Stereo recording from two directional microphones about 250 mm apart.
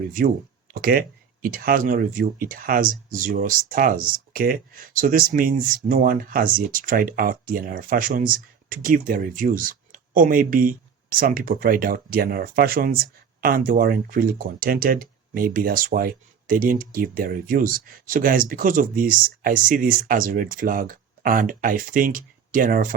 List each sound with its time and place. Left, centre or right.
0.7 s speech: right